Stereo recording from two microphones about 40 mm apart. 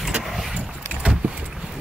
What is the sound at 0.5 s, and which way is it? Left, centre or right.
Vehicle, right.